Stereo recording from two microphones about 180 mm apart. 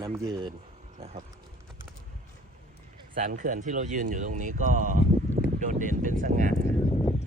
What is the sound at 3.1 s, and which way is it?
Speech, 45° right (ahead or behind).